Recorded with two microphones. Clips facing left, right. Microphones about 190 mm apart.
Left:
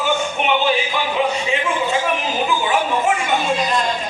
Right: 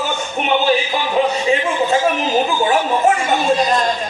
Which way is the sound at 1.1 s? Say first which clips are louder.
Right 5 dB; 40° right (ahead or behind).